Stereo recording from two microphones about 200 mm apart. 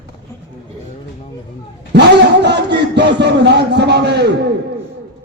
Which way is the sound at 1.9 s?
55° right (ahead or behind).